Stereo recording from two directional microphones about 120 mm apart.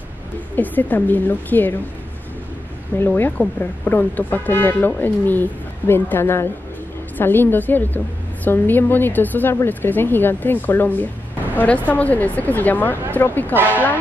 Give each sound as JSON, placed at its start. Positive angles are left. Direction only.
{"t": 0.6, "sound": "speech", "side_deg": 15}
{"t": 3.0, "sound": "speech", "side_deg": 15}
{"t": 13.6, "sound": "speech", "side_deg": -15}